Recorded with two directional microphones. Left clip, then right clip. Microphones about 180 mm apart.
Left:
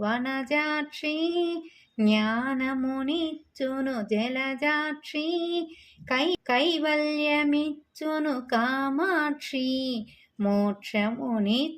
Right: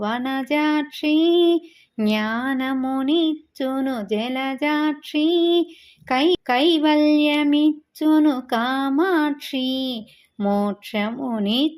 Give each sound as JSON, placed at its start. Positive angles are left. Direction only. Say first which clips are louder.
{"t": 0.0, "sound": "female singing", "louder": "right 4 dB", "side_deg": -25}